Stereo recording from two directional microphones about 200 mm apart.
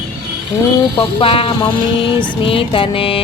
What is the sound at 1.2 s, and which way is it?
Speech, 25° left (ahead or behind).